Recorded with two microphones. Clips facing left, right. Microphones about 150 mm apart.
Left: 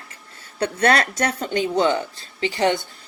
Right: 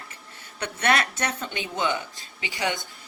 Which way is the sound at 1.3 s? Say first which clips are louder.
Left 10 dB; 40° left (ahead or behind).